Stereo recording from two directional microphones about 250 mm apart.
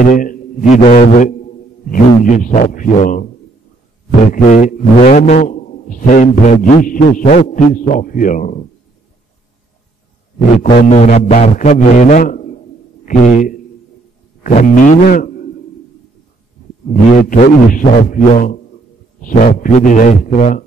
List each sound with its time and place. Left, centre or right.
0.0 s a man's voice: left
4.3 s a man's voice: left
10.7 s a man's voice: left
17.3 s a man's voice: left